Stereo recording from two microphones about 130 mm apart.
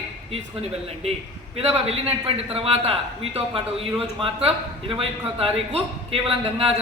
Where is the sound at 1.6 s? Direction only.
50° right (ahead or behind).